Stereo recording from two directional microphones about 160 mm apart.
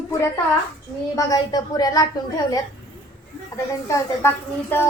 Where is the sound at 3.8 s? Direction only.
15° left (ahead or behind).